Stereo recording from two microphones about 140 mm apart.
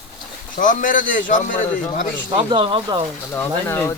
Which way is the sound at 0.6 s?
70° left (ahead or behind).